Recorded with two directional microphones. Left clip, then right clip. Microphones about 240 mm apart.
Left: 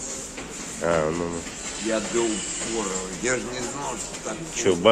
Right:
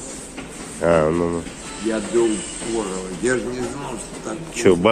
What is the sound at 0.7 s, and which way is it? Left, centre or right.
Speech, centre.